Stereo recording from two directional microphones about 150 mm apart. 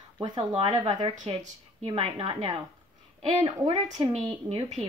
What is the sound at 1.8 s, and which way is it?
Speech, 40° right (ahead or behind).